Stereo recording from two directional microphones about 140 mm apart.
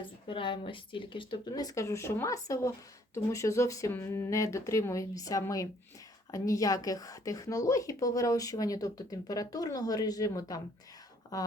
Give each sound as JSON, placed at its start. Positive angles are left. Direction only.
{"t": 0.0, "sound": "speech", "side_deg": 35}